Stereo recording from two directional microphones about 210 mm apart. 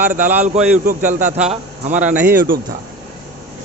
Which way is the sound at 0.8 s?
40° right (ahead or behind).